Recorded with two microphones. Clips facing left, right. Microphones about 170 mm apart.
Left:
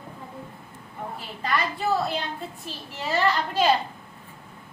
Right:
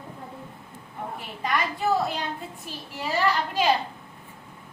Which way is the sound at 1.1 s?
15° right (ahead or behind).